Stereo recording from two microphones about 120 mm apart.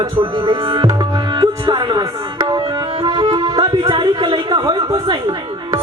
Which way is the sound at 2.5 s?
35° right (ahead or behind).